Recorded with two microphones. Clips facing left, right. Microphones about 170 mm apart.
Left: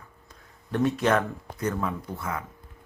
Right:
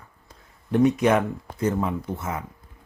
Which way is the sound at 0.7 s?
15° right (ahead or behind).